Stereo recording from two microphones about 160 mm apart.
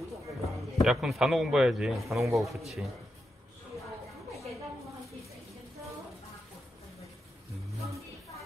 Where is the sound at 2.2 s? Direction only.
20° right (ahead or behind).